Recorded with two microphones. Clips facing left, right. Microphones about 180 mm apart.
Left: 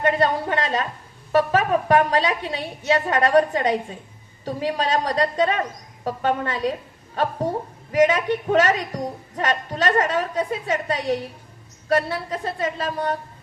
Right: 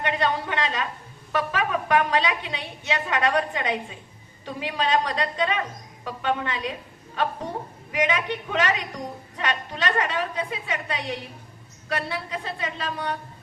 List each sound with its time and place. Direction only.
0.0 s a woman's voice: 45° left (ahead or behind)
7.9 s a woman's voice: 45° left (ahead or behind)